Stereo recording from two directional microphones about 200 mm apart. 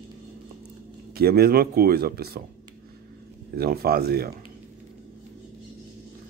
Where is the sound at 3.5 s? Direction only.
50° right (ahead or behind).